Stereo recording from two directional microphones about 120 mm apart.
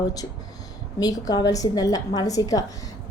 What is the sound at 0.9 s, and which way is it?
A woman's voice, 35° left (ahead or behind).